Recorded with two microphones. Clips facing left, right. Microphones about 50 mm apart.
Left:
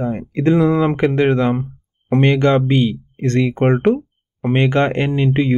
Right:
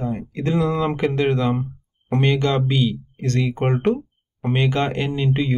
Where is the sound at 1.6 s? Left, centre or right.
Centre.